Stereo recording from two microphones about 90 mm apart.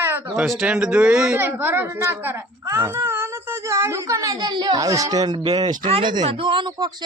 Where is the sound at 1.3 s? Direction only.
25° right (ahead or behind); by 4.8 s 55° right (ahead or behind).